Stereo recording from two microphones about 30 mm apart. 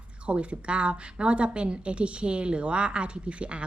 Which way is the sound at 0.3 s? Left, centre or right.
Right.